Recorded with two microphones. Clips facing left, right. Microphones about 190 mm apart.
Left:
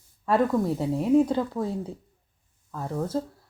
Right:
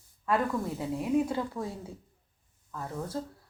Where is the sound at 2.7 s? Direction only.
30° left (ahead or behind).